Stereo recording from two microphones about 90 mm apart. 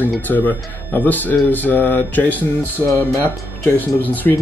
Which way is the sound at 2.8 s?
40° left (ahead or behind).